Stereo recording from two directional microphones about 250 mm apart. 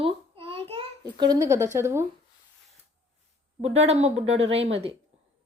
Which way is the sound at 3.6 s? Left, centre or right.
Right.